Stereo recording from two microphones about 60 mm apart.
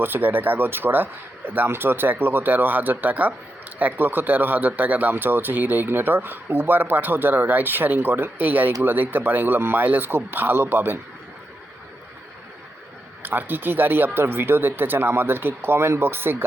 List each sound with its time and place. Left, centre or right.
0.0 s speech: right
13.2 s speech: right